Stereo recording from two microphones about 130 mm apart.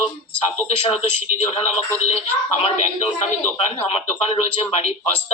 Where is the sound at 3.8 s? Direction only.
50° left (ahead or behind).